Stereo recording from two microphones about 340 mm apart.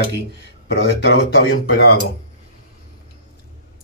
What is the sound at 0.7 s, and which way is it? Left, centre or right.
Speech, left.